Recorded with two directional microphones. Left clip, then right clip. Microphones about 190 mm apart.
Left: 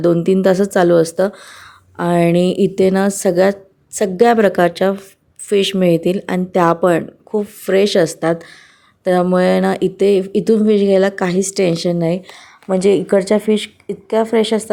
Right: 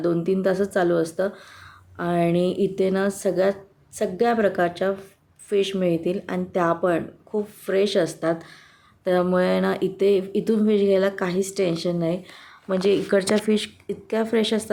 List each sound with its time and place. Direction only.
0.0 s speech: 40° left (ahead or behind); by 14.7 s 20° left (ahead or behind)